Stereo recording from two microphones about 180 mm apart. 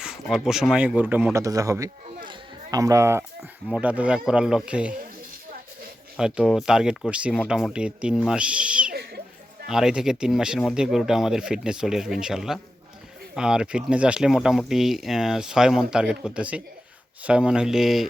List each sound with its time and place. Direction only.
0.0 s speech: 5° right (ahead or behind)
6.1 s speech: 5° right (ahead or behind)
8.9 s a sound: 60° right (ahead or behind)
9.6 s speech: 5° right (ahead or behind)